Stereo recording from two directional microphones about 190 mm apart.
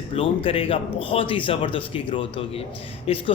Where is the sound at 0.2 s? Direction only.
30° left (ahead or behind).